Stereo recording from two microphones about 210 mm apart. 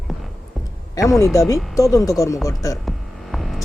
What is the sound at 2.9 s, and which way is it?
Hum, centre (ahead or behind).